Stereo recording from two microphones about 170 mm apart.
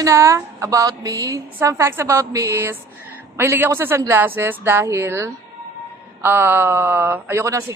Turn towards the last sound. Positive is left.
turn(degrees=-15)  # may be behind; listen again after turning